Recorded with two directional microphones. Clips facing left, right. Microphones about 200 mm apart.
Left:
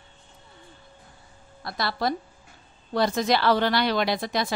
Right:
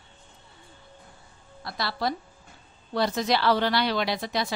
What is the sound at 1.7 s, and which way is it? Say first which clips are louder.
A woman's voice: left 2 dB; 50° left (ahead or behind).